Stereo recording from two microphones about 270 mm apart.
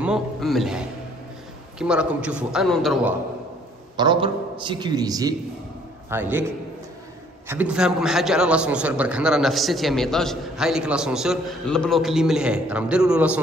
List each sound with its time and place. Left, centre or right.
0.0 s a man's voice: centre
3.9 s a man's voice: centre